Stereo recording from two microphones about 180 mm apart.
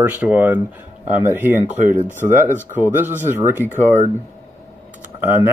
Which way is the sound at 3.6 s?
10° left (ahead or behind).